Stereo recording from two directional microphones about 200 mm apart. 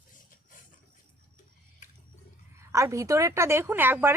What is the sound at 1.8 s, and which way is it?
Wild animals, 40° left (ahead or behind).